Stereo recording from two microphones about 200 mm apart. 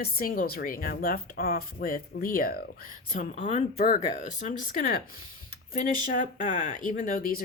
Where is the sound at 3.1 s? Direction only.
35° left (ahead or behind).